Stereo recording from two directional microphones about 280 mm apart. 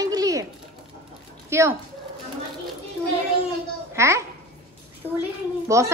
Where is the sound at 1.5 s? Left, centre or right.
Centre.